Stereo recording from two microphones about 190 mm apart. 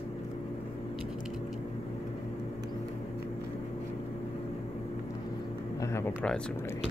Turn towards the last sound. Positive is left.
turn(degrees=10)  # may be behind; listen again after turning